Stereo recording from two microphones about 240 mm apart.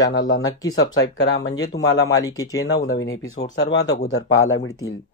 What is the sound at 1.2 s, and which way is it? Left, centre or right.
Speech, left.